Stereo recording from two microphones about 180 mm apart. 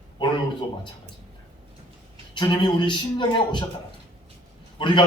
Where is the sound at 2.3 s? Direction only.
25° left (ahead or behind).